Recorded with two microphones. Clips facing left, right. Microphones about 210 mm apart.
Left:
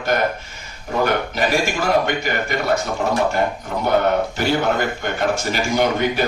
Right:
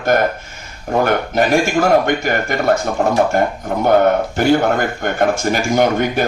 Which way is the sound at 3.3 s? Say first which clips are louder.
Right 4 dB; 50° right (ahead or behind).